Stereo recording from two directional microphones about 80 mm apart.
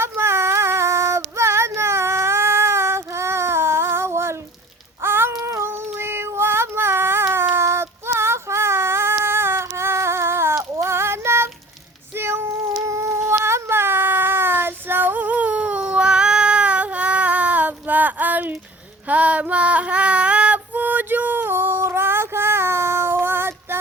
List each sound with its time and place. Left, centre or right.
0.0 s female singing: right
5.0 s child singing: right
5.3 s female singing: right
7.3 s child singing: right
12.1 s cat: right
19.0 s female singing: centre